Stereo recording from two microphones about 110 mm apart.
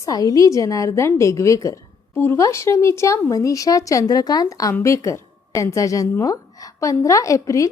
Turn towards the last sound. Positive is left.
turn(degrees=30)  # may be behind; listen again after turning